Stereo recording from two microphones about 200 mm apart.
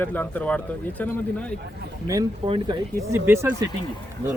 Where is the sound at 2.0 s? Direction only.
15° right (ahead or behind).